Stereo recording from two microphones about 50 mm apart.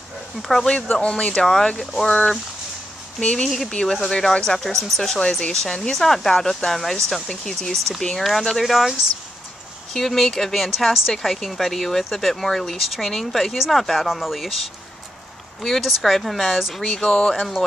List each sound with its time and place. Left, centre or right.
0.4 s speech: centre
1.0 s speech: centre
1.4 s speech: centre
2.0 s speech: centre
3.4 s speech: centre
9.9 s speech: centre
16.8 s speech: centre